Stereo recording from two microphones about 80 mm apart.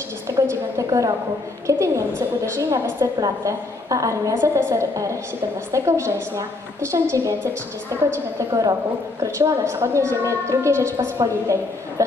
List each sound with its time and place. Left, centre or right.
0.3 s a woman's voice: right
9.2 s a woman's voice: right